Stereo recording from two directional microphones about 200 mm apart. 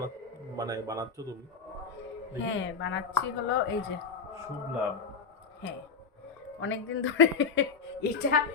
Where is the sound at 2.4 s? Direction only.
65° left (ahead or behind).